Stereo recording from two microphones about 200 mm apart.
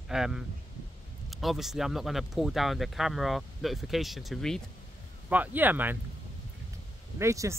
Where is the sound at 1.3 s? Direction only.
Centre (ahead or behind).